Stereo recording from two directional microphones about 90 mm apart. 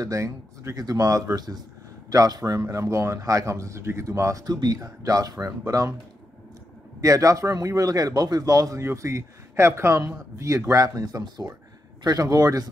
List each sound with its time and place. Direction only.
0.0 s speech: 35° right (ahead or behind)
7.0 s a man's voice: 40° right (ahead or behind)